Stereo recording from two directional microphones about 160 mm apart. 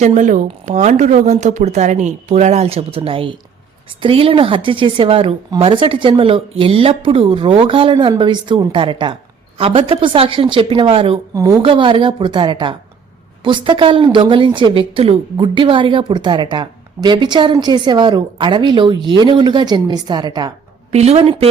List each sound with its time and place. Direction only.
0.2 s speech: 50° right (ahead or behind); by 11.2 s 35° right (ahead or behind)
11.3 s a woman's voice: 25° right (ahead or behind)
20.9 s speech: 40° right (ahead or behind)